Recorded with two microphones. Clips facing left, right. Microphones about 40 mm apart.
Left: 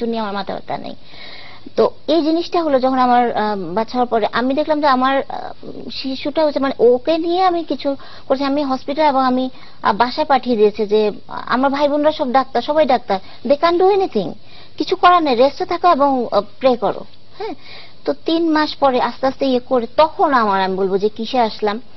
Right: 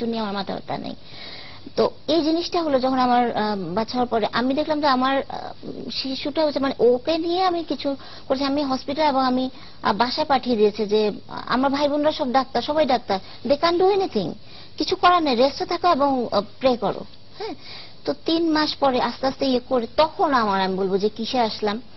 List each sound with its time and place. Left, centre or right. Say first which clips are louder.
0.0 s a woman's voice: left 5 dB; centre
2.0 s a woman's voice: left 5 dB; centre
5.9 s a woman's voice: left 5 dB; centre
18.5 s a woman's voice: left 5 dB; centre
18.8 s a woman's voice: left 5 dB; centre
21.2 s a woman's voice: left 5 dB; centre